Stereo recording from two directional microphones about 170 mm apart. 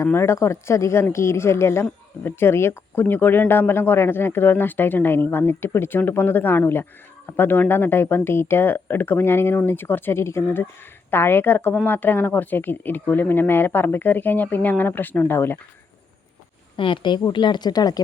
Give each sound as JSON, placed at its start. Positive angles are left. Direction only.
{"t": 0.0, "sound": "a woman's voice", "side_deg": 15}
{"t": 16.7, "sound": "a woman's voice", "side_deg": 30}